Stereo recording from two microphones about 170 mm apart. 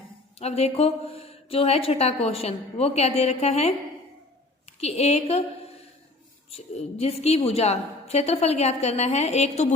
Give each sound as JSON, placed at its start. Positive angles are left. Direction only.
{"t": 0.3, "sound": "a woman's voice", "side_deg": 35}
{"t": 4.8, "sound": "a woman's voice", "side_deg": 40}
{"t": 6.5, "sound": "a woman's voice", "side_deg": 35}